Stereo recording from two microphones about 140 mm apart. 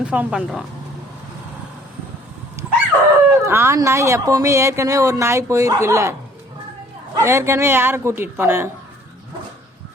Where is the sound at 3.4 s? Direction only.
20° right (ahead or behind).